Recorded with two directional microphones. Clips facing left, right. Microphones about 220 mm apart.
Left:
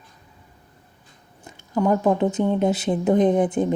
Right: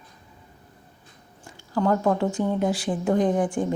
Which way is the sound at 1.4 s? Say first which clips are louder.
Left 2 dB; 20° left (ahead or behind).